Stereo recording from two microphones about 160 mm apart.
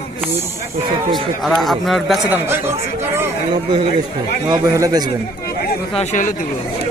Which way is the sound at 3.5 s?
30° right (ahead or behind).